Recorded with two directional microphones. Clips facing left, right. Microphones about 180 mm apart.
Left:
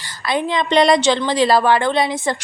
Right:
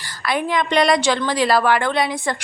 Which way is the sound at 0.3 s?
25° left (ahead or behind).